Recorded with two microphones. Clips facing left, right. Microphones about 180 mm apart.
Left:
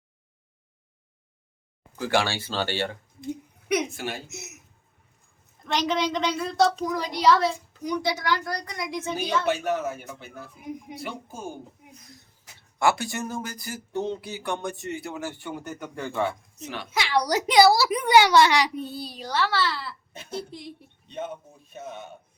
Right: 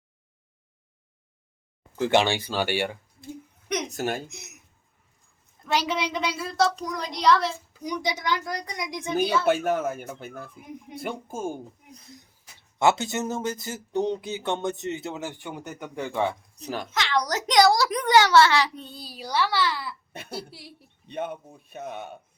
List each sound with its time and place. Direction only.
2.0 s a woman's voice: 20° right (ahead or behind)
3.8 s a man's voice: 45° right (ahead or behind)
4.3 s a woman's voice: centre (ahead or behind)
5.6 s a woman's voice: 10° right (ahead or behind)
7.7 s a woman's voice: 10° right (ahead or behind)
9.5 s a man's voice: 50° right (ahead or behind)
12.8 s speech: 20° right (ahead or behind)
16.6 s a child's voice: 40° right (ahead or behind)
16.9 s a woman's voice: 10° left (ahead or behind)
21.1 s a man's voice: 60° right (ahead or behind)